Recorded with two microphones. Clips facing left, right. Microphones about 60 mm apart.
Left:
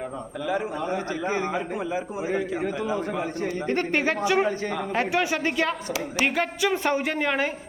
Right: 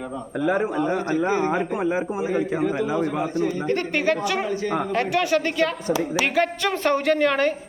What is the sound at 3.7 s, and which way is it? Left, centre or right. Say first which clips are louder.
A woman's voice: left 1 dB; left.